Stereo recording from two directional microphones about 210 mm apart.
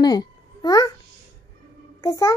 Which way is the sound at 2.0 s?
15° left (ahead or behind).